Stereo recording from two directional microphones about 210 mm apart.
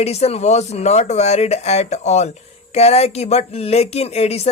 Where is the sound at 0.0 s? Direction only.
30° left (ahead or behind).